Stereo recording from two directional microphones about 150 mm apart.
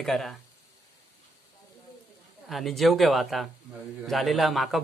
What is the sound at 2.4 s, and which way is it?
Speech, centre (ahead or behind).